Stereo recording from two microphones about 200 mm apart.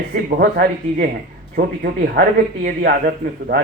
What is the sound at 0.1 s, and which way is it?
Speech, 45° right (ahead or behind).